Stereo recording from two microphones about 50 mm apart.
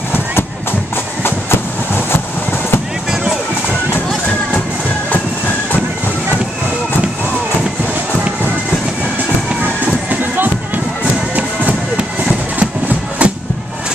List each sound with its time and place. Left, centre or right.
10.0 s music: right
12.5 s music: right